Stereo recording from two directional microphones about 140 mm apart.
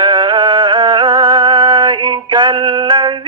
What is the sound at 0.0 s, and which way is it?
Music, 35° right (ahead or behind).